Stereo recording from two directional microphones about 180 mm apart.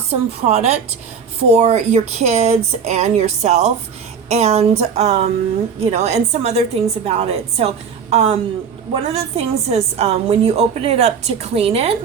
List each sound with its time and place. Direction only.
0.1 s a woman's voice: 35° right (ahead or behind)